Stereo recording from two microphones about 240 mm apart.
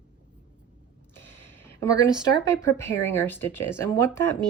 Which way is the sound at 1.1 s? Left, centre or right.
Centre.